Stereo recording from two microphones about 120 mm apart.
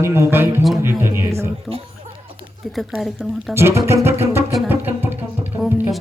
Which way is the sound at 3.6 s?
20° right (ahead or behind).